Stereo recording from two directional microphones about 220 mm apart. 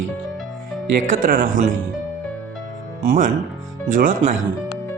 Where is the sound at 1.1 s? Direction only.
40° right (ahead or behind).